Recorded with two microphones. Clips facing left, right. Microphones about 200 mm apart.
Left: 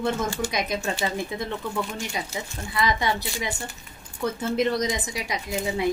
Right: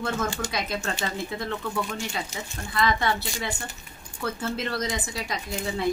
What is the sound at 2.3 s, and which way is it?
Speech, 20° right (ahead or behind).